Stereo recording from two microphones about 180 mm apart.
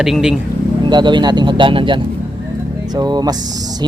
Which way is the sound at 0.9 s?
25° right (ahead or behind).